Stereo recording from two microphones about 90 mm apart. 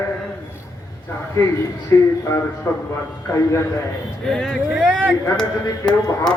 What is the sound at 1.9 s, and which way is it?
Speech, 35° left (ahead or behind).